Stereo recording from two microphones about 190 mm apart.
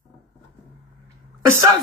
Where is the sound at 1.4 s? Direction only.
15° right (ahead or behind).